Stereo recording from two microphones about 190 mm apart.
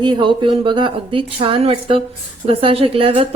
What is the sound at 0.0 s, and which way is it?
A woman's voice, 25° right (ahead or behind).